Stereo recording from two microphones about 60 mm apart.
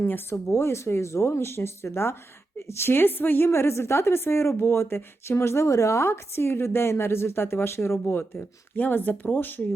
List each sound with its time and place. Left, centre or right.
0.0 s a woman's voice: left